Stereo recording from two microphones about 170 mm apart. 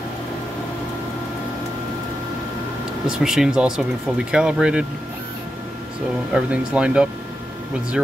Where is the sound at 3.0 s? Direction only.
5° right (ahead or behind).